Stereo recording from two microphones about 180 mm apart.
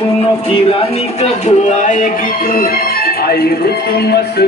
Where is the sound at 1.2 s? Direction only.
45° left (ahead or behind).